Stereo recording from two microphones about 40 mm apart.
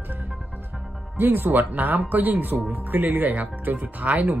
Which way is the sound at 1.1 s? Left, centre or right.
Right.